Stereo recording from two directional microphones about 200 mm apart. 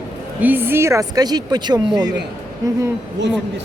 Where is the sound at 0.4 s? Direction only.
10° right (ahead or behind).